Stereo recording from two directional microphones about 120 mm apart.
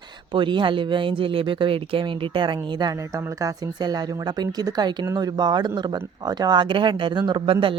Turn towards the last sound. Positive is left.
turn(degrees=-40)  # may be behind; listen again after turning